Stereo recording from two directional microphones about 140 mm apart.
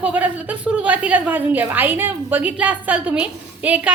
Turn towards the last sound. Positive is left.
turn(degrees=-10)  # may be behind; listen again after turning